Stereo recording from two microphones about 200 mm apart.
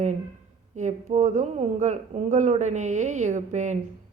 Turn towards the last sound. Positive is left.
turn(degrees=-35)  # may be behind; listen again after turning